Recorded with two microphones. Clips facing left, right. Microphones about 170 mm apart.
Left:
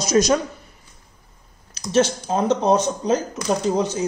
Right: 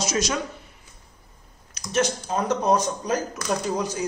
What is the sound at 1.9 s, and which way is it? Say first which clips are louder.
Speech: left 5 dB; 30° left (ahead or behind).